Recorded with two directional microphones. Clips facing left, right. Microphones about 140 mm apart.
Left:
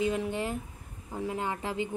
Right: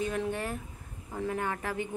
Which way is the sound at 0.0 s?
15° left (ahead or behind).